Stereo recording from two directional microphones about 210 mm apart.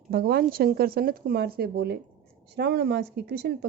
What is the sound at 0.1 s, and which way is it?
A woman's voice, 50° right (ahead or behind).